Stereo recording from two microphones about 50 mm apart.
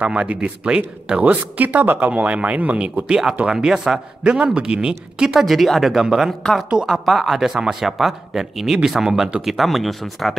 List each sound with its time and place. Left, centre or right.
0.0 s speech: right
1.2 s speech: right
3.1 s speech: centre
5.3 s speech: centre
6.9 s speech: centre